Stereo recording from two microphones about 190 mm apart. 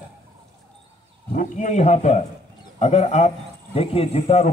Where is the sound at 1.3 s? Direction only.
40° left (ahead or behind).